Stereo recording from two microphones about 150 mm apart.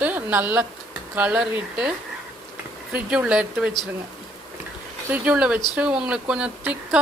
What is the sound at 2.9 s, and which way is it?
Speech, 5° right (ahead or behind).